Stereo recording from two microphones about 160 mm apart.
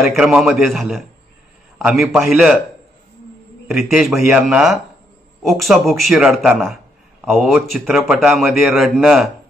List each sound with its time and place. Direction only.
0.0 s a man's voice: centre (ahead or behind)
3.7 s a man's voice: centre (ahead or behind)